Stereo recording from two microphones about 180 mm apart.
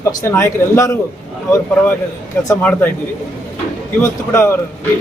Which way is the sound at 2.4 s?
10° left (ahead or behind).